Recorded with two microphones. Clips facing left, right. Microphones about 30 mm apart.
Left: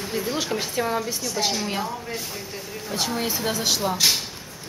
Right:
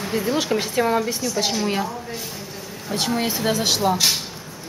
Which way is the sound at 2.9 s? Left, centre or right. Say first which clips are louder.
Right 3 dB; right.